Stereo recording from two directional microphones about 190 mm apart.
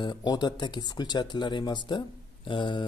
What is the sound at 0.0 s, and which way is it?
Speech, 25° left (ahead or behind).